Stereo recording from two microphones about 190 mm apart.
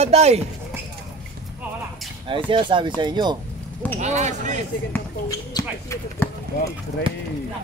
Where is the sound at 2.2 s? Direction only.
25° right (ahead or behind).